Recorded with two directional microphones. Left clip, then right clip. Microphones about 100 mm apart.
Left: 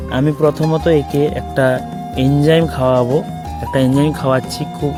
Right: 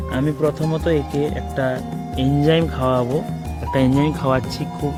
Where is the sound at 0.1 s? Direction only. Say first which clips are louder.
Left 6 dB; 85° left.